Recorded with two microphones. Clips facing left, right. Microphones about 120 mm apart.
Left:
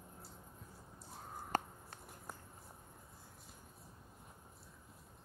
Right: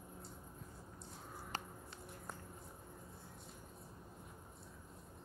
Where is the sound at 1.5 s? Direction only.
50° left (ahead or behind).